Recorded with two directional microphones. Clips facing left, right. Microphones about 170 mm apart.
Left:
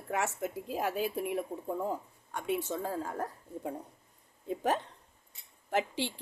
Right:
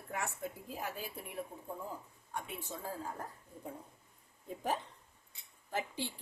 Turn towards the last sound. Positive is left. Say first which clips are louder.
# left 7 dB
turn(degrees=80)